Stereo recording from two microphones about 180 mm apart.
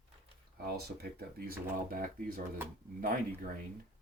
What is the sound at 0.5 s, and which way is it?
Speech, 60° right (ahead or behind).